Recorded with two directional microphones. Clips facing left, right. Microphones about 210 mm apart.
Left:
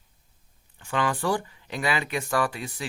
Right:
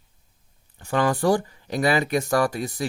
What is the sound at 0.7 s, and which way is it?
Speech, 40° right (ahead or behind).